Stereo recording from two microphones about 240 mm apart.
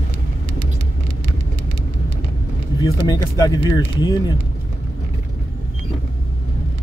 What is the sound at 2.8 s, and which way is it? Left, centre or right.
Speech, centre.